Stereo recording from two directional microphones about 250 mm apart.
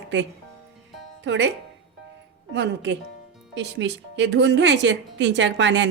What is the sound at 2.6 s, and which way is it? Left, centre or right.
A woman's voice, right.